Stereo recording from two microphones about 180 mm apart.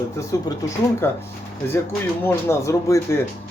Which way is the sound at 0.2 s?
15° left (ahead or behind).